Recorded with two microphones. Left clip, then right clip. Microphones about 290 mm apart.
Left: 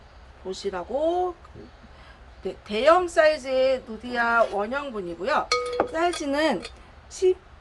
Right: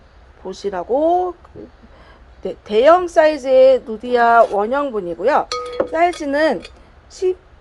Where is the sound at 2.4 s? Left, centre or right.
Centre.